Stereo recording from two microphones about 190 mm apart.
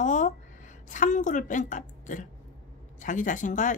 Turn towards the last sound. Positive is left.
turn(degrees=40)  # may be behind; listen again after turning